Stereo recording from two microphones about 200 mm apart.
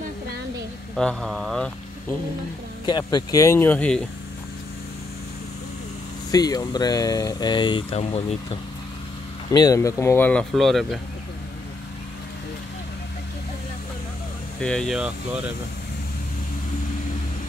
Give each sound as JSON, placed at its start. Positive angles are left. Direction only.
{"t": 0.9, "sound": "speech", "side_deg": 0}
{"t": 2.9, "sound": "speech", "side_deg": 20}
{"t": 6.3, "sound": "speech", "side_deg": 20}
{"t": 9.5, "sound": "speech", "side_deg": 20}
{"t": 14.6, "sound": "speech", "side_deg": 5}